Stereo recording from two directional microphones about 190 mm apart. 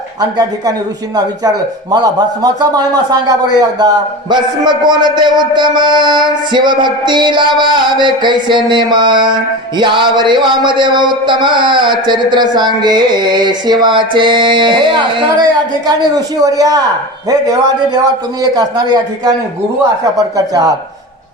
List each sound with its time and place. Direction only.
0.2 s a man's voice: 20° right (ahead or behind)
1.9 s a man's voice: 20° right (ahead or behind)